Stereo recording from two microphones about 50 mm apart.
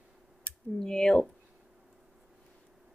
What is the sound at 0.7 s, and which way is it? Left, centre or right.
Speech, centre.